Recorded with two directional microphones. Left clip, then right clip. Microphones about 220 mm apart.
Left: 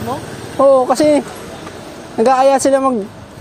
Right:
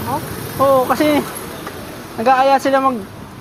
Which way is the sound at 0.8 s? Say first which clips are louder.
Left 3 dB; 55° left (ahead or behind).